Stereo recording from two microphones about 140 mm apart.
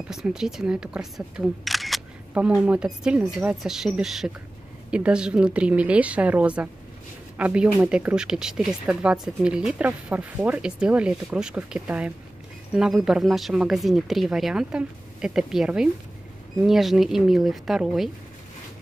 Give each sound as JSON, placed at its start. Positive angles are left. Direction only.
{"t": 0.1, "sound": "speech", "side_deg": -5}